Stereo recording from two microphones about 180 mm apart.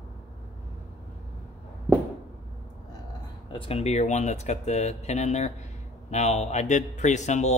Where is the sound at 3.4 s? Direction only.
30° left (ahead or behind).